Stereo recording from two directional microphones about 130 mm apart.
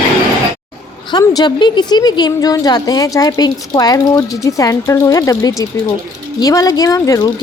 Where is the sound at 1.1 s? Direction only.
30° left (ahead or behind).